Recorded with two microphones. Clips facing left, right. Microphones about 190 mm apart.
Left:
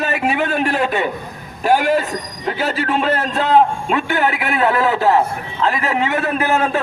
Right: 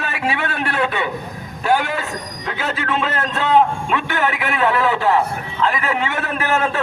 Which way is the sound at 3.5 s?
40° left (ahead or behind).